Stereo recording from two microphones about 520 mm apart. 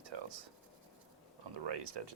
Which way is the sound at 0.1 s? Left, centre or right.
Right.